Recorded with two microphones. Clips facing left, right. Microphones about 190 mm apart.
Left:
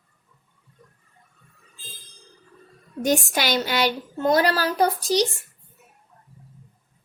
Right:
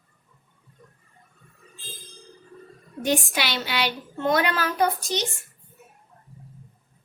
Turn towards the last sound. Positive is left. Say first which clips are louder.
# left 4 dB
turn(degrees=35)  # may be behind; listen again after turning